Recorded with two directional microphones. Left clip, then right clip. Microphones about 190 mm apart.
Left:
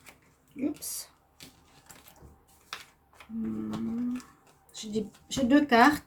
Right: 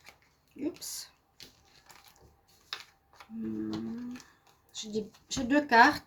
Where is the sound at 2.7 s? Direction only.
35° right (ahead or behind).